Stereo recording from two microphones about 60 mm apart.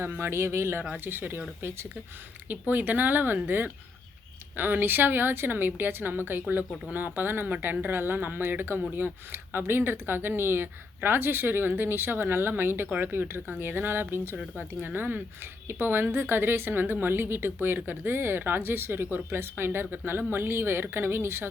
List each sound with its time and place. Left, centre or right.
0.0 s speech: right
0.9 s speech: right
2.5 s speech: right